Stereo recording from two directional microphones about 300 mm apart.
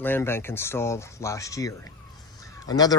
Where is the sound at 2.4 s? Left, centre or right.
Centre.